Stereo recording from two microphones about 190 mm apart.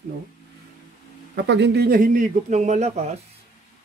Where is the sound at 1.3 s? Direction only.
65° right (ahead or behind); by 3.0 s 35° right (ahead or behind).